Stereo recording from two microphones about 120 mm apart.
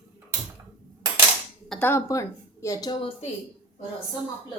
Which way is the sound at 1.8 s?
20° left (ahead or behind).